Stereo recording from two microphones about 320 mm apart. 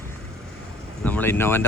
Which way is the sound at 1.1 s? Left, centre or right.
Centre.